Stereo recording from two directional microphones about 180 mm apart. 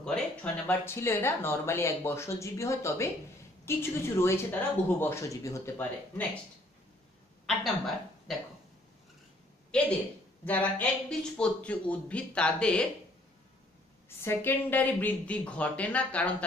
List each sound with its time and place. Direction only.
0.0 s speech: 5° left (ahead or behind)
7.4 s speech: centre (ahead or behind)
10.4 s speech: 10° left (ahead or behind)
14.0 s speech: 15° left (ahead or behind)